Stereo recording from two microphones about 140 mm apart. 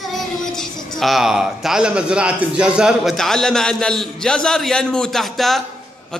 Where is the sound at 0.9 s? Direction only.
Centre (ahead or behind).